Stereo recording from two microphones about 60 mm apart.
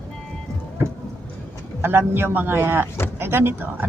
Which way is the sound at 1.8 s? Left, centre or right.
Right.